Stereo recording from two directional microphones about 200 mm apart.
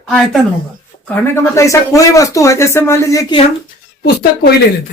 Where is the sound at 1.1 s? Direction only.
10° left (ahead or behind).